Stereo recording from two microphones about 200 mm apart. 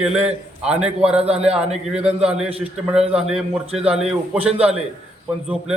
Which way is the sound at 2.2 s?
5° right (ahead or behind).